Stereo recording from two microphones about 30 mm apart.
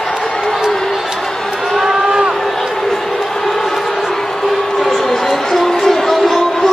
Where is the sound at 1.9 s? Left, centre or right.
Right.